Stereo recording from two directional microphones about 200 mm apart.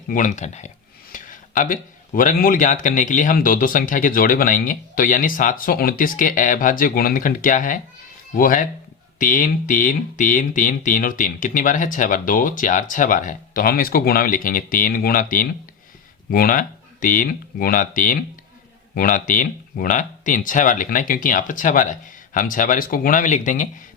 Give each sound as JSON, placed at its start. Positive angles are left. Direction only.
{"t": 0.1, "sound": "speech", "side_deg": 40}